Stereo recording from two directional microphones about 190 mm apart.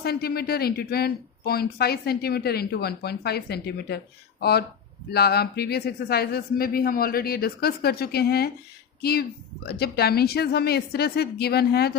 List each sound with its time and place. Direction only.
0.0 s speech: 55° left (ahead or behind)